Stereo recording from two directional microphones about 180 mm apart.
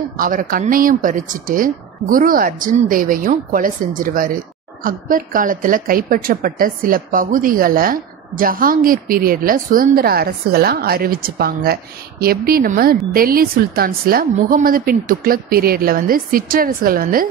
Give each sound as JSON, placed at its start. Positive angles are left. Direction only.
{"t": 0.2, "sound": "a woman's voice", "side_deg": -50}